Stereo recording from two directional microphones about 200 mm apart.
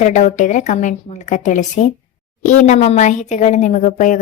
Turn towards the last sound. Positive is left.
turn(degrees=40)  # may be behind; listen again after turning